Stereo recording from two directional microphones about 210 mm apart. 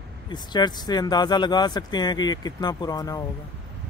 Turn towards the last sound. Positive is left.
turn(degrees=15)  # may be behind; listen again after turning